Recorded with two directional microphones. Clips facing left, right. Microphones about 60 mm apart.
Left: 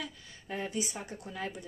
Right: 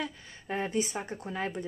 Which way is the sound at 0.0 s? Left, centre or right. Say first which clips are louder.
Right 5 dB; right.